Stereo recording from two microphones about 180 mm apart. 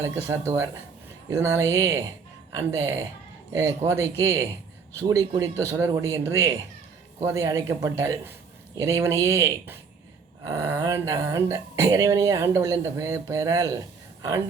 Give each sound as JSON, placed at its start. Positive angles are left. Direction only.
{"t": 0.0, "sound": "speech", "side_deg": -15}